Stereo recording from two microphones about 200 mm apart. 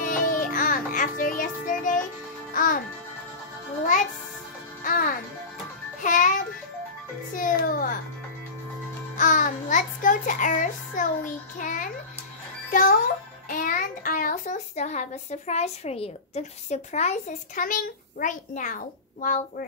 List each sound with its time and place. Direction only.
0.0 s music: 40° left (ahead or behind)
4.8 s music: 45° left (ahead or behind)
9.1 s child singing: 40° left (ahead or behind)
12.7 s music: 40° left (ahead or behind)
13.5 s a child's voice: 40° left (ahead or behind)